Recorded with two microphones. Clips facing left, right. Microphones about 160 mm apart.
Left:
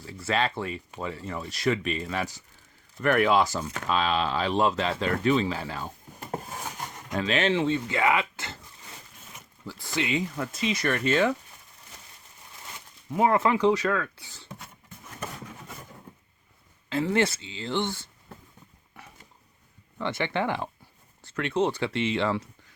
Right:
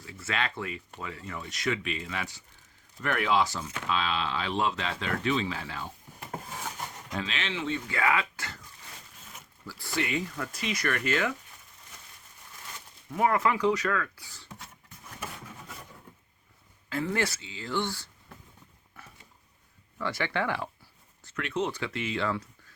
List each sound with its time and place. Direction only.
0.0 s speech: 30° left (ahead or behind)
3.0 s speech: 50° left (ahead or behind)
7.9 s speech: 20° left (ahead or behind)
9.6 s speech: 20° left (ahead or behind)
13.1 s speech: 25° left (ahead or behind)
16.9 s speech: 25° left (ahead or behind)
20.0 s speech: 20° left (ahead or behind)